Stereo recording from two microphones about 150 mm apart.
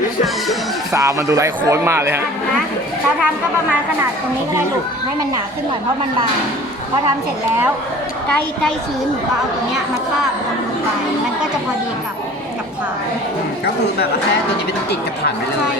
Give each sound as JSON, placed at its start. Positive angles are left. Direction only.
{"t": 0.9, "sound": "speech", "side_deg": -20}